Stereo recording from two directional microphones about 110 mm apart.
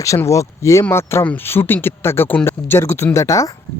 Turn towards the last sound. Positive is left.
turn(degrees=30)  # may be behind; listen again after turning